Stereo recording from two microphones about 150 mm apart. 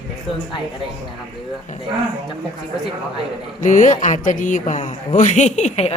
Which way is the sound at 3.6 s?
55° left (ahead or behind).